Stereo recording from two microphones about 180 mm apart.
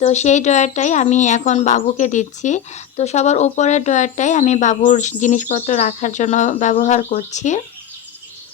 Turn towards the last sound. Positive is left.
turn(degrees=40)  # may be behind; listen again after turning